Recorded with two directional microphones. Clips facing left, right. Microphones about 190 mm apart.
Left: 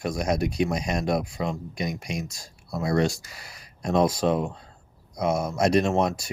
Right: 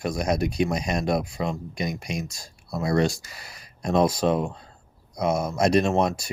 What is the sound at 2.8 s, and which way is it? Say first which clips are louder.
Speech: right 1 dB; 35° right (ahead or behind).